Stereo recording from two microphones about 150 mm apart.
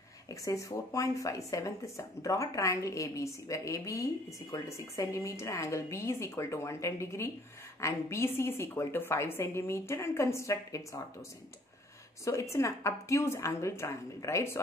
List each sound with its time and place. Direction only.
0.3 s a woman's voice: 20° left (ahead or behind)
12.3 s speech: 20° left (ahead or behind)